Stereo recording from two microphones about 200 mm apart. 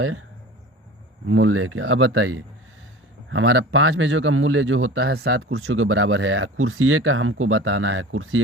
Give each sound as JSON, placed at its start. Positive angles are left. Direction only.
{"t": 1.3, "sound": "speech", "side_deg": -90}
{"t": 3.2, "sound": "a man's voice", "side_deg": -75}
{"t": 5.1, "sound": "speech", "side_deg": -60}